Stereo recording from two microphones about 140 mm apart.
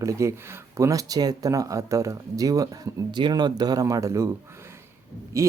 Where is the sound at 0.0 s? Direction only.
20° right (ahead or behind).